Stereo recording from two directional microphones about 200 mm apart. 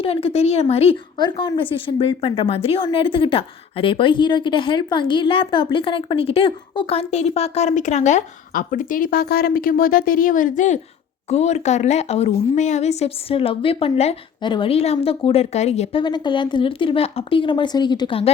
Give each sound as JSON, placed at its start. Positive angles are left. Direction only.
{"t": 0.0, "sound": "a woman's voice", "side_deg": 30}